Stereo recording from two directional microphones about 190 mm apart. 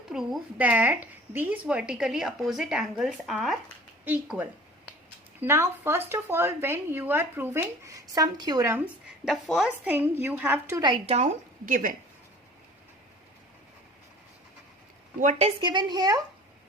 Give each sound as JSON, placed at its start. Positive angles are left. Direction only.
{"t": 0.1, "sound": "a woman's voice", "side_deg": -5}
{"t": 10.8, "sound": "a woman's voice", "side_deg": -30}
{"t": 15.2, "sound": "speech", "side_deg": -35}